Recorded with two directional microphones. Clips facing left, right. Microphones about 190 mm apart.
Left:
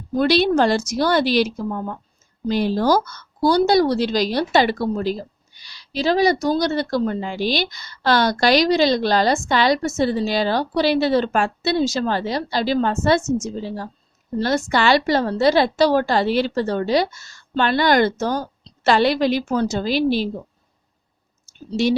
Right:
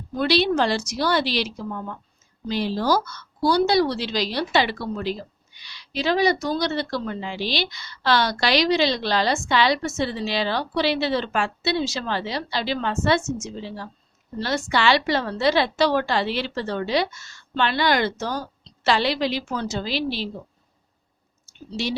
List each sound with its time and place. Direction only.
0.1 s speech: 45° left (ahead or behind)
21.7 s speech: 45° left (ahead or behind)